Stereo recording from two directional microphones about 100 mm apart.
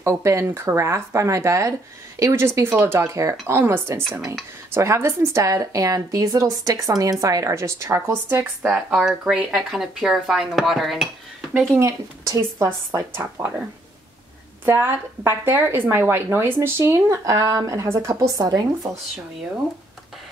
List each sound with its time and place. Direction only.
0.0 s speech: 30° right (ahead or behind)
8.6 s speech: 5° right (ahead or behind)
11.7 s speech: 30° right (ahead or behind)
14.6 s speech: 20° right (ahead or behind)
18.4 s speech: 35° right (ahead or behind)